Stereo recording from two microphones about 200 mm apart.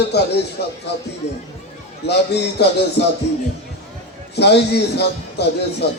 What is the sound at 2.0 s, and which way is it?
A man's voice, 55° left (ahead or behind).